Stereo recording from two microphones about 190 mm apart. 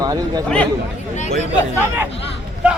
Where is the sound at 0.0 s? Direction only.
20° right (ahead or behind).